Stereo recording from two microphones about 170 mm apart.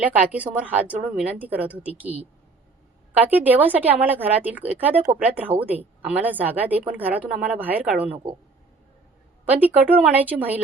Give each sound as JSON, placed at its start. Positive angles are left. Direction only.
{"t": 0.0, "sound": "speech", "side_deg": -10}
{"t": 3.1, "sound": "speech", "side_deg": -10}
{"t": 9.5, "sound": "speech", "side_deg": -10}